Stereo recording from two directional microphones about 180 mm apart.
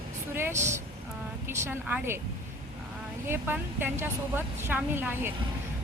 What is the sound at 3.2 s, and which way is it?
Speech, 10° right (ahead or behind).